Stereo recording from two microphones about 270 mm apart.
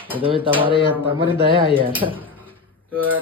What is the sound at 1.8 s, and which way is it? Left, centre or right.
Speech, centre.